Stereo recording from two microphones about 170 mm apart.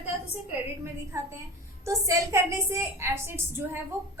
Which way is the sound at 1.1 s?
15° right (ahead or behind).